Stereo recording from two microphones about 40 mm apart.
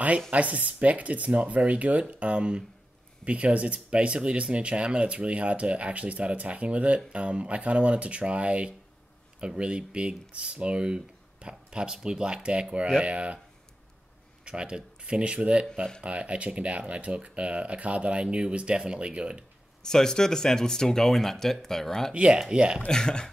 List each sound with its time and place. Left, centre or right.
0.3 s speech: right
14.4 s speech: right
19.8 s speech: centre
22.1 s speech: right
22.8 s speech: centre